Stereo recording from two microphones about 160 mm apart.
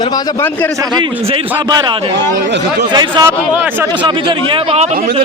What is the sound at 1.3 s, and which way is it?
A man's voice, 25° right (ahead or behind).